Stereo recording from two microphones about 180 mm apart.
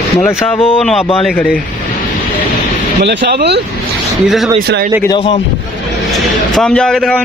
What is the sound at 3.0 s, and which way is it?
Speech, 70° right (ahead or behind).